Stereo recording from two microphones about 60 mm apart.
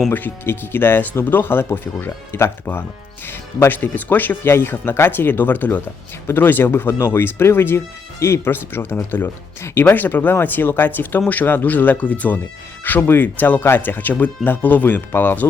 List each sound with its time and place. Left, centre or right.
0.1 s speech: left